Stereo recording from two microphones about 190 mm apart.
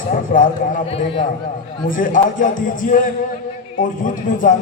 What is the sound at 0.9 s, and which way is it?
Speech, 30° left (ahead or behind).